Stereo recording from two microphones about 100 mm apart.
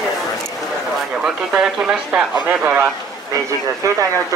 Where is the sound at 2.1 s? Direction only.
15° right (ahead or behind).